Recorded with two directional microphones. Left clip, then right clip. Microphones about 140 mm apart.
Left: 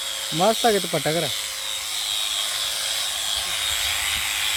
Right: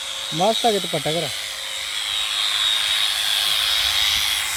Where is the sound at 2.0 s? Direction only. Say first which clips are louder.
Right 3 dB; 90° left.